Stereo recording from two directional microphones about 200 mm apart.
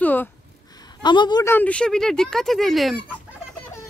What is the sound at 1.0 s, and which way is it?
Speech, 20° left (ahead or behind).